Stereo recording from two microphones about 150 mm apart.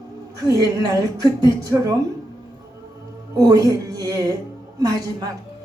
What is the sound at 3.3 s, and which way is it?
A woman's voice, 25° right (ahead or behind).